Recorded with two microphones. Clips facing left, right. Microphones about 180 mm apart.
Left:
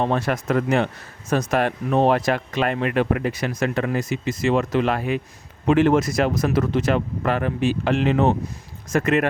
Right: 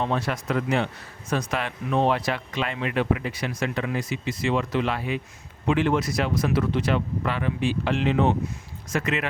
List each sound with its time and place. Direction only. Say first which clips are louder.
0.0 s speech: left 4 dB; 55° left (ahead or behind)